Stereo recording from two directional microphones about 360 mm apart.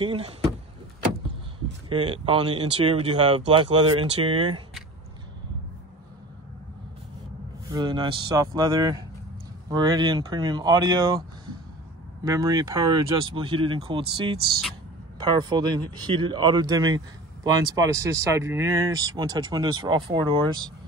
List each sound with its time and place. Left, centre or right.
0.0 s speech: centre
1.9 s speech: centre
7.7 s speech: centre